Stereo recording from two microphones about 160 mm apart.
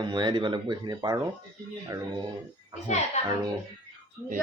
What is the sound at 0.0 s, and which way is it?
Speech, 30° right (ahead or behind).